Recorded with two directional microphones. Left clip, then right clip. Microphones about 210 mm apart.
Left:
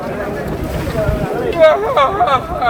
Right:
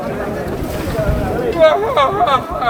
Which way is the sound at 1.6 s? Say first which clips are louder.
Left 1 dB; 50° right (ahead or behind).